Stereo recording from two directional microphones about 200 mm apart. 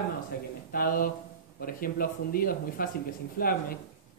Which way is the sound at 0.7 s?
45° left (ahead or behind).